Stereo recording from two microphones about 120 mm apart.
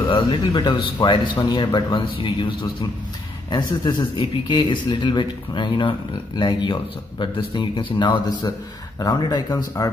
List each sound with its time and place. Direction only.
0.1 s speech: 40° left (ahead or behind)